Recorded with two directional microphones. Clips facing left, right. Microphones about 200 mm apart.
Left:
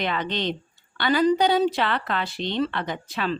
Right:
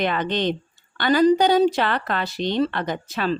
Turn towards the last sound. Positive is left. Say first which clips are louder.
# right 3 dB
turn(degrees=-40)  # may be behind; listen again after turning